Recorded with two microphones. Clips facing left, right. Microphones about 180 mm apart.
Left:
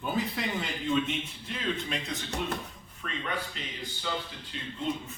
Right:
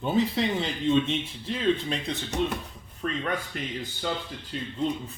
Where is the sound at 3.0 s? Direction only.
45° right (ahead or behind).